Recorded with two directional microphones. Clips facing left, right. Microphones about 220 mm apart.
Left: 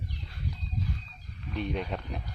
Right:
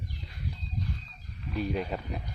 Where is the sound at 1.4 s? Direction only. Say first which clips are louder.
Right 2 dB; centre (ahead or behind).